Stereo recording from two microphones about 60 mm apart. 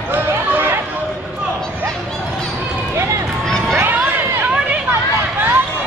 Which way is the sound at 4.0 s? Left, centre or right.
Right.